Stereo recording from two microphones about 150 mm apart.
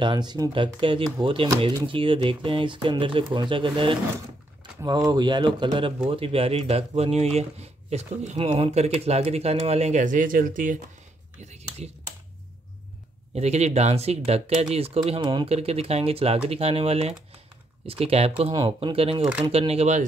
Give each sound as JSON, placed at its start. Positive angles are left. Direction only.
{"t": 0.0, "sound": "speech", "side_deg": -30}
{"t": 11.4, "sound": "speech", "side_deg": -45}
{"t": 13.3, "sound": "speech", "side_deg": -45}